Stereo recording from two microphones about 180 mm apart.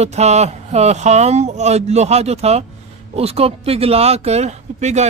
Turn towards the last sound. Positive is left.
turn(degrees=-40)  # may be behind; listen again after turning